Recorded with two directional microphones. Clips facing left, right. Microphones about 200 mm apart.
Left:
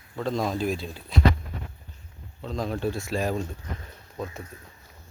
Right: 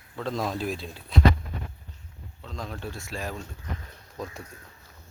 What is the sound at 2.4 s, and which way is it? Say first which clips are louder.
Speech: left 8 dB; 35° left (ahead or behind).